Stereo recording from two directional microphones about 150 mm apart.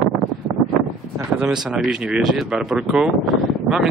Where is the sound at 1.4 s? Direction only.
5° right (ahead or behind).